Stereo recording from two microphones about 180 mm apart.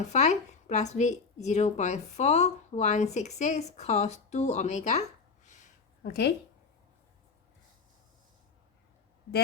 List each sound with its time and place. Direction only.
0.1 s a woman's voice: 40° left (ahead or behind)
6.0 s speech: 60° left (ahead or behind)